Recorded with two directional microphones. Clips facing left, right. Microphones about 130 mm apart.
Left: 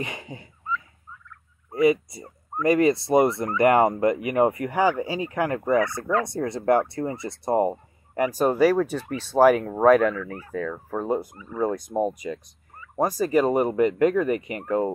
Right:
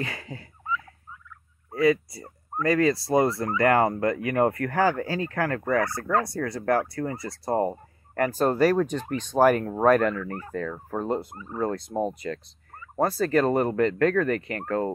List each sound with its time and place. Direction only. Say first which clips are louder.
0.0 s turkey: even; 20° left (ahead or behind)
1.7 s speech: left 2 dB; 20° left (ahead or behind)
2.6 s turkey: left 3 dB; 20° left (ahead or behind)
3.5 s speech: left 3 dB; 20° left (ahead or behind)
6.2 s turkey: left 3 dB; 20° left (ahead or behind)
6.9 s speech: left 2 dB; 25° left (ahead or behind); by 11.1 s centre (ahead or behind)
11.5 s speech: left 3 dB; 15° left (ahead or behind)